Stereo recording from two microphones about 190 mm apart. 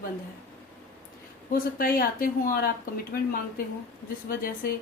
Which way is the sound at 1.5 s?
50° left (ahead or behind).